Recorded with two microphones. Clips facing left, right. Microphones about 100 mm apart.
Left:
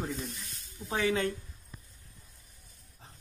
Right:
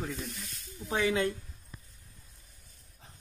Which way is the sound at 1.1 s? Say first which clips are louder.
Even; 15° right (ahead or behind).